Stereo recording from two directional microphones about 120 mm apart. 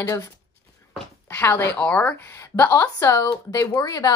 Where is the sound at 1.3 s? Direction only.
20° left (ahead or behind).